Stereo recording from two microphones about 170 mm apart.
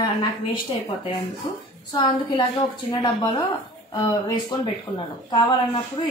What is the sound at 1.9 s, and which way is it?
Speech, 20° left (ahead or behind).